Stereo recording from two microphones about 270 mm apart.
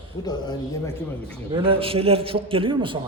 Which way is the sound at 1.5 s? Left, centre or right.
Centre.